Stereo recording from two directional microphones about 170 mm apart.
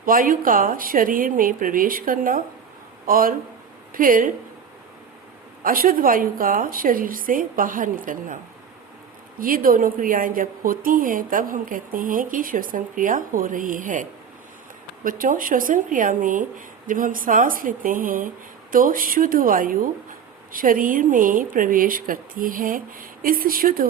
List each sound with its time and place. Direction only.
0.0 s a woman's voice: 55° right (ahead or behind)
5.6 s a woman's voice: 55° right (ahead or behind)
9.4 s a woman's voice: 55° right (ahead or behind)